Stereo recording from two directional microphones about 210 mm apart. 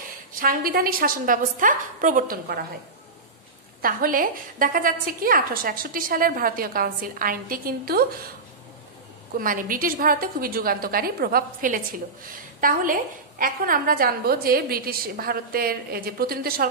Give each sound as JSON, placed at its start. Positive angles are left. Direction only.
{"t": 0.3, "sound": "a woman's voice", "side_deg": -40}
{"t": 3.8, "sound": "a woman's voice", "side_deg": -40}
{"t": 9.4, "sound": "a woman's voice", "side_deg": -40}